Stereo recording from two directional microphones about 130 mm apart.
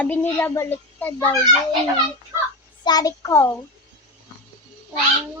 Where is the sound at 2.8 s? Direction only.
30° left (ahead or behind).